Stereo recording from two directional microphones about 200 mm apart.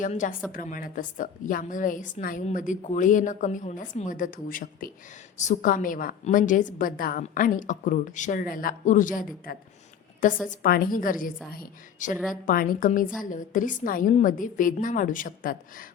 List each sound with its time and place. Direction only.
0.0 s a woman's voice: 40° left (ahead or behind)